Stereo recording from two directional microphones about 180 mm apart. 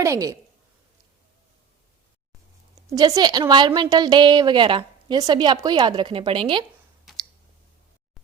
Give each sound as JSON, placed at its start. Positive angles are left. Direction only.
{"t": 0.0, "sound": "a woman's voice", "side_deg": -15}
{"t": 2.9, "sound": "a woman's voice", "side_deg": -20}